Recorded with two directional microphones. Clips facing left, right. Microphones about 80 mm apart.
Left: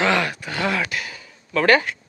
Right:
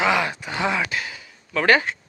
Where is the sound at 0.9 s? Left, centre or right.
Right.